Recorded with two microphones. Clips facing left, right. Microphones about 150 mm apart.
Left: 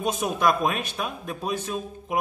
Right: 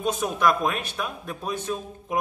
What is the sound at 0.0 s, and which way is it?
Speech, 15° left (ahead or behind).